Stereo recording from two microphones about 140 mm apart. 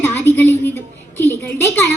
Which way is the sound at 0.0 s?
15° left (ahead or behind).